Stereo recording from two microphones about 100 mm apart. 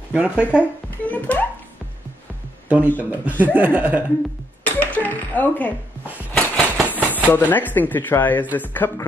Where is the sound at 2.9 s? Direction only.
15° right (ahead or behind).